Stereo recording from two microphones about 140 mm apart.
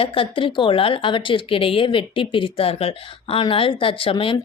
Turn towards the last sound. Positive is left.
turn(degrees=40)  # may be behind; listen again after turning